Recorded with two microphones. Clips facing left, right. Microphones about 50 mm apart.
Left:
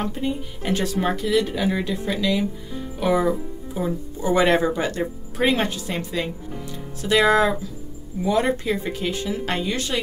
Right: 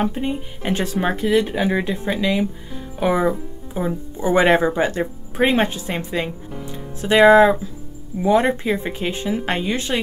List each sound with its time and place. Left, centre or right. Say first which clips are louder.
0.0 s speech: right 3 dB; right